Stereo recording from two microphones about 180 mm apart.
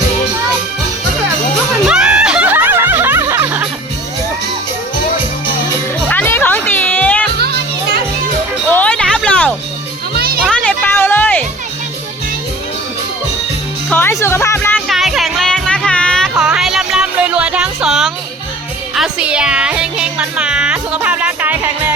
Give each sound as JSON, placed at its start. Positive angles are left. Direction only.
{"t": 1.9, "sound": "snicker", "side_deg": -5}
{"t": 6.1, "sound": "music", "side_deg": 10}
{"t": 7.3, "sound": "children playing", "side_deg": -60}
{"t": 8.7, "sound": "music", "side_deg": 5}
{"t": 10.2, "sound": "music", "side_deg": -55}
{"t": 10.5, "sound": "music", "side_deg": 5}
{"t": 13.9, "sound": "music", "side_deg": 15}
{"t": 14.8, "sound": "music", "side_deg": 0}